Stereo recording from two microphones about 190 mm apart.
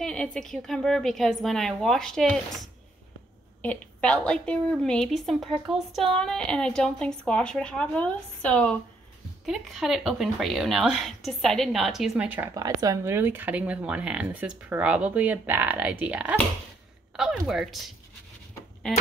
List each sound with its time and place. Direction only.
0.0 s a woman's voice: 5° left (ahead or behind)
3.6 s a woman's voice: 5° left (ahead or behind)
12.5 s speech: 20° right (ahead or behind)
17.5 s a woman's voice: centre (ahead or behind)